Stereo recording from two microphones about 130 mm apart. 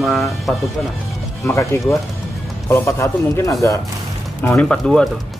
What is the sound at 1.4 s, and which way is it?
A man's voice, 20° left (ahead or behind).